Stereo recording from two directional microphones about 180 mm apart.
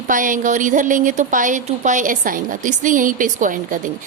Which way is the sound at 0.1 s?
45° right (ahead or behind).